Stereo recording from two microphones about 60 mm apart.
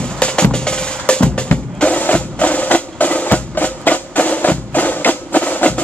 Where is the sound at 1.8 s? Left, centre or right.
Left.